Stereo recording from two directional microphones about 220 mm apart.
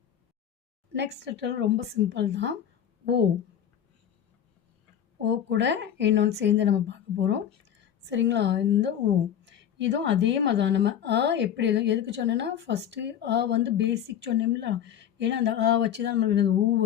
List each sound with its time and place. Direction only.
0.9 s speech: 50° right (ahead or behind)
5.2 s speech: 55° right (ahead or behind)